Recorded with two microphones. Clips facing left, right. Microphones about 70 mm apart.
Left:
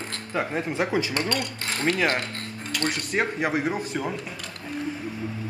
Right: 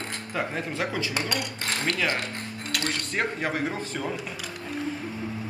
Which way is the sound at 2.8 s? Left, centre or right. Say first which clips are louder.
Left 3 dB; centre.